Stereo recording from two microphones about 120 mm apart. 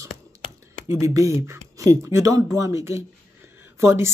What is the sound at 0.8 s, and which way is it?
Speech, 25° right (ahead or behind).